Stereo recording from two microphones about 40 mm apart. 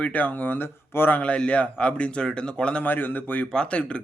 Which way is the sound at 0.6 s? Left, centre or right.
Left.